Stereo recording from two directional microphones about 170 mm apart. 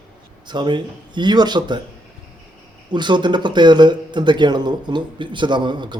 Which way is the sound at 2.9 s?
25° right (ahead or behind).